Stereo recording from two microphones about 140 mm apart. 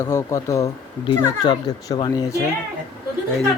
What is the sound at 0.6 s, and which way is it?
Speech, 35° left (ahead or behind).